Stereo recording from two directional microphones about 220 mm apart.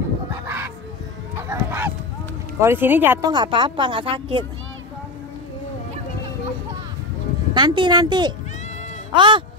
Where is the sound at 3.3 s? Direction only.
20° right (ahead or behind).